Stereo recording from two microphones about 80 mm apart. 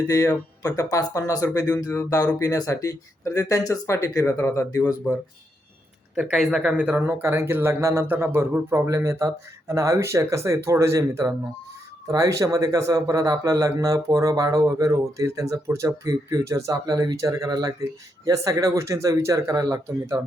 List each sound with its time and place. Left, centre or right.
0.1 s speech: left
6.1 s speech: centre
6.8 s speech: right
8.0 s speech: right
8.9 s a man's voice: right